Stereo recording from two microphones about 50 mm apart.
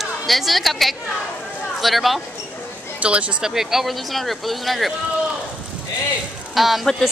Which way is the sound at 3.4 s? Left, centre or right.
Centre.